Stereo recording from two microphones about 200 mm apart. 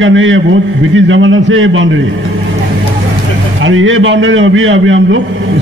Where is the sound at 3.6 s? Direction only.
75° right (ahead or behind).